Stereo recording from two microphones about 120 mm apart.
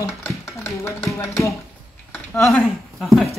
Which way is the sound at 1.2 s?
25° left (ahead or behind).